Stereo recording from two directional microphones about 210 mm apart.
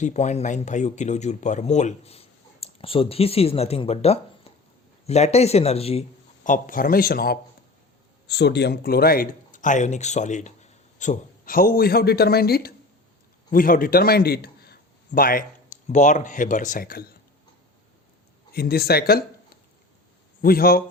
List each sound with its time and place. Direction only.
0.0 s a man's voice: 35° left (ahead or behind)
18.5 s speech: 50° left (ahead or behind)
20.4 s speech: 45° left (ahead or behind)